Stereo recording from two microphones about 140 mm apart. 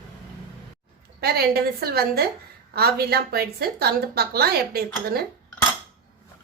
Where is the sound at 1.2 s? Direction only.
90° right.